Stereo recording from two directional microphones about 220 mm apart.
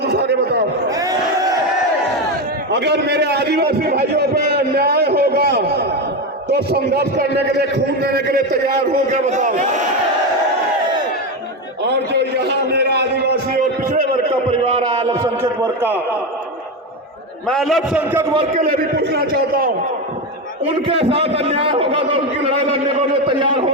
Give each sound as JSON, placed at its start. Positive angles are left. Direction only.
{"t": 0.0, "sound": "a sound", "side_deg": -50}
{"t": 0.9, "sound": "a sound", "side_deg": -15}
{"t": 2.6, "sound": "a man's voice", "side_deg": -50}
{"t": 8.9, "sound": "a man's voice", "side_deg": -35}
{"t": 11.8, "sound": "a sound", "side_deg": -50}
{"t": 14.8, "sound": "a man's voice", "side_deg": -20}
{"t": 17.5, "sound": "a man's voice", "side_deg": 0}
{"t": 18.7, "sound": "a man's voice", "side_deg": -45}
{"t": 20.8, "sound": "a man's voice", "side_deg": -25}